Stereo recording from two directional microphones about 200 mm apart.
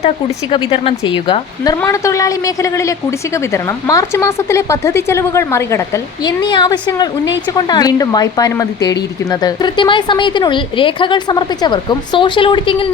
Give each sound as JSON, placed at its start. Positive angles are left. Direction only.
{"t": 0.5, "sound": "a woman's voice", "side_deg": 25}